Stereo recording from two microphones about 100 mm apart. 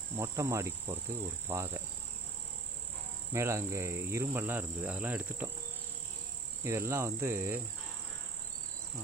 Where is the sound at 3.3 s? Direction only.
25° right (ahead or behind).